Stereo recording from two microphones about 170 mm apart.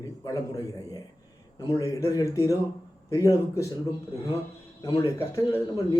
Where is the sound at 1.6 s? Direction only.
20° left (ahead or behind).